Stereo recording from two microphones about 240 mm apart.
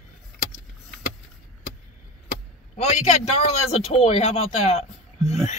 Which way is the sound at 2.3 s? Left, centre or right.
Left.